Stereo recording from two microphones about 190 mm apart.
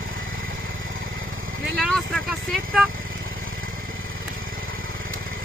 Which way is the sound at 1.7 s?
Centre (ahead or behind).